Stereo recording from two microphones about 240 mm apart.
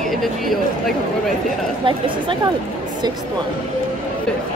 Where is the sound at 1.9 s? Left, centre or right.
Right.